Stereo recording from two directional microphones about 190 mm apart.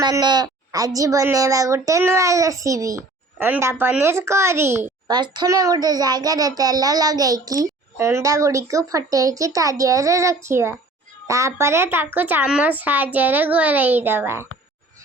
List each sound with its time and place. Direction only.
0.0 s a woman's voice: 20° right (ahead or behind)